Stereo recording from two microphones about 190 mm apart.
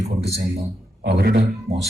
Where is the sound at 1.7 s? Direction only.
35° right (ahead or behind).